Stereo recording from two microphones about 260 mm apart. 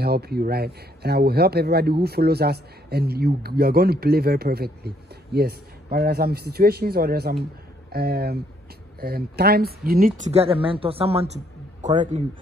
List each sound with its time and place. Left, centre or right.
0.0 s speech: right